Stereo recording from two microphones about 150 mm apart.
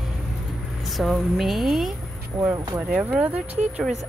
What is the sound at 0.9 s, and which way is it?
Speech, centre (ahead or behind).